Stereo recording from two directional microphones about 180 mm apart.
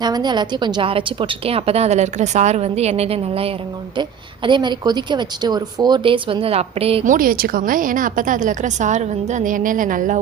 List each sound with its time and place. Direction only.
0.0 s a woman's voice: 25° right (ahead or behind)
7.1 s a woman's voice: 50° right (ahead or behind)